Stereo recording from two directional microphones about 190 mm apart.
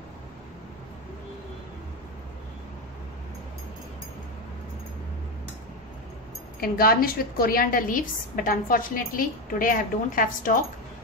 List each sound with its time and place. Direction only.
6.6 s a woman's voice: 50° left (ahead or behind)